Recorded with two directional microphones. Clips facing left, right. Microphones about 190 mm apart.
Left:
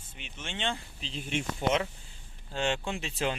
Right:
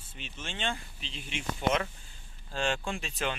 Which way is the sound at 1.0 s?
40° left (ahead or behind).